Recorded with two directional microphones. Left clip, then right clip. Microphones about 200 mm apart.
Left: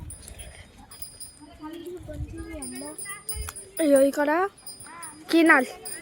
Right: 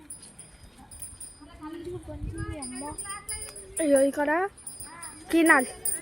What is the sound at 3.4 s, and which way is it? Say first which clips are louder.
Speech: left 3 dB; 30° left (ahead or behind).